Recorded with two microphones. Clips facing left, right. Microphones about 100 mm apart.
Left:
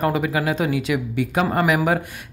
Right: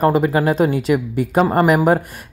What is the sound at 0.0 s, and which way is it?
Speech, 35° right (ahead or behind).